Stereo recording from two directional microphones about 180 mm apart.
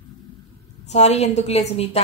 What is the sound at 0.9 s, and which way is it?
A woman's voice, 40° left (ahead or behind).